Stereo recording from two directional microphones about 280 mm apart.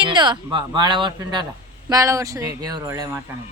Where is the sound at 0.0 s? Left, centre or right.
Centre.